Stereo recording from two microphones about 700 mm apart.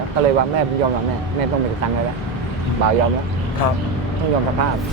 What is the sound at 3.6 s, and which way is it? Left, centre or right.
Speech, left.